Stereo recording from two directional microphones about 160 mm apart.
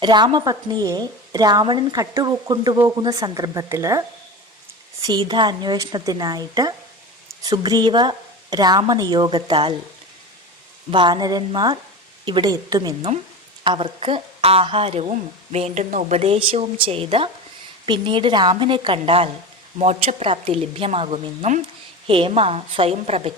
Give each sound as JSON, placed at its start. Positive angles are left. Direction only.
{"t": 0.0, "sound": "a woman's voice", "side_deg": -30}
{"t": 5.0, "sound": "a woman's voice", "side_deg": -30}
{"t": 10.9, "sound": "a woman's voice", "side_deg": -30}
{"t": 13.7, "sound": "speech", "side_deg": -35}